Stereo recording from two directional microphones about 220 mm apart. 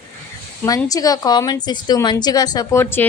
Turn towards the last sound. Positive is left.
turn(degrees=10)  # may be behind; listen again after turning